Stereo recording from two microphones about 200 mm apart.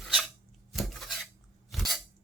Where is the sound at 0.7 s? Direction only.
Centre (ahead or behind).